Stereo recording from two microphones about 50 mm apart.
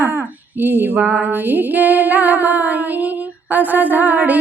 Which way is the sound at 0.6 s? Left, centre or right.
Right.